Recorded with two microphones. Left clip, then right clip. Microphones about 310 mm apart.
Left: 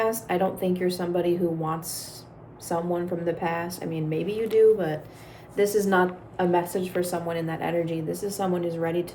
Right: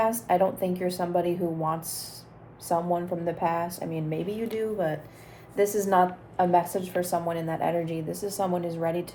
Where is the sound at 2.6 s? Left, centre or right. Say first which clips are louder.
Right 1 dB; centre.